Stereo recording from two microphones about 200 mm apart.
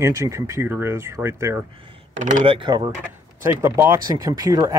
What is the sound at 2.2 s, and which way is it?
Speech, 40° right (ahead or behind).